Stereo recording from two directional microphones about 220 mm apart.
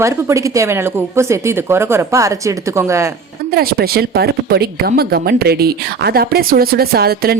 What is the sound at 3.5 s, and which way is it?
Speech, 45° right (ahead or behind).